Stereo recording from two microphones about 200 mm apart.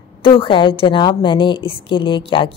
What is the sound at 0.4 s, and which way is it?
A woman's voice, 25° left (ahead or behind).